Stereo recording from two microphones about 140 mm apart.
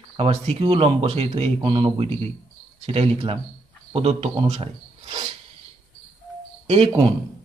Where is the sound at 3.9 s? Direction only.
45° right (ahead or behind).